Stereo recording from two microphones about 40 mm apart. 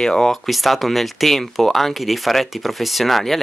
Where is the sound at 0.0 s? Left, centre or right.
Centre.